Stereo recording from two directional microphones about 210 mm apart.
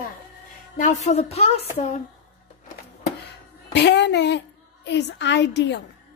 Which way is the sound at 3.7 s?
55° left (ahead or behind).